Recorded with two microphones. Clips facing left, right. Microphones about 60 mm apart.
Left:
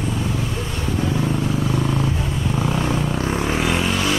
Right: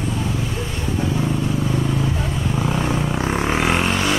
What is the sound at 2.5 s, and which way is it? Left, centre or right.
Vehicle, centre.